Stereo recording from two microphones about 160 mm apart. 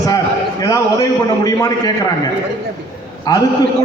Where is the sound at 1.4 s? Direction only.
20° left (ahead or behind).